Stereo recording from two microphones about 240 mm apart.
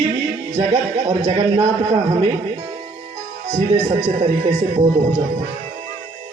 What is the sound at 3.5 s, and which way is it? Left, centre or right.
Speech, right.